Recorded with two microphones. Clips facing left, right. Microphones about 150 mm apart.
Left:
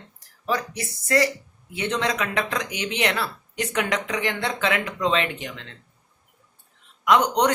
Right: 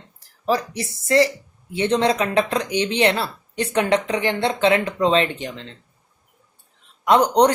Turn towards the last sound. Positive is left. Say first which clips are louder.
# right 4 dB
turn(degrees=-35)  # may be behind; listen again after turning